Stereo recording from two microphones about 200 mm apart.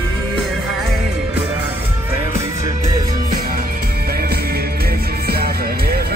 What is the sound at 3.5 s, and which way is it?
Music, 45° right (ahead or behind).